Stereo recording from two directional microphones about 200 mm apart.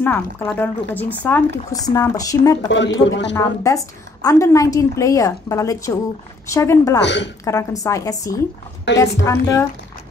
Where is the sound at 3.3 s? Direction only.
15° left (ahead or behind).